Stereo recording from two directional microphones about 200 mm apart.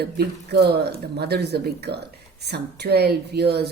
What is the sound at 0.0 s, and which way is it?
Speech, 55° right (ahead or behind).